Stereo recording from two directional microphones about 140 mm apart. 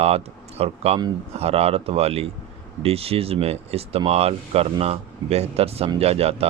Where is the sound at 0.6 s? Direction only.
45° right (ahead or behind).